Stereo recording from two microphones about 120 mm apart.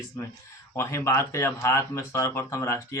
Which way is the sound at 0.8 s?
25° left (ahead or behind).